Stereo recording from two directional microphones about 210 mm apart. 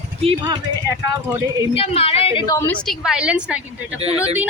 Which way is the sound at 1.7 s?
30° left (ahead or behind).